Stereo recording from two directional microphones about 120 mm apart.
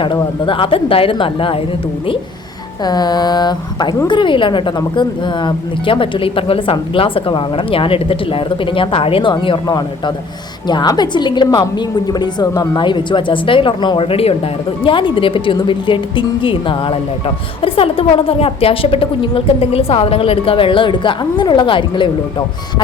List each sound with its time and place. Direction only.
0.0 s a woman's voice: 40° left (ahead or behind)
2.8 s a woman's voice: 35° left (ahead or behind)